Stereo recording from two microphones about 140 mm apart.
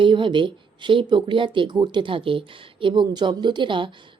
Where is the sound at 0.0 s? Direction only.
35° right (ahead or behind).